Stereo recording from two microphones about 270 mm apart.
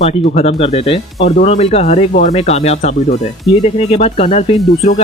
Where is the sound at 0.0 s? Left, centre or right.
Left.